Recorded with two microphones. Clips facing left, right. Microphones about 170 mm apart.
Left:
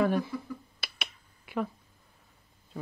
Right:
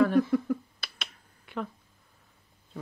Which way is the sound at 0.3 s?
55° right (ahead or behind).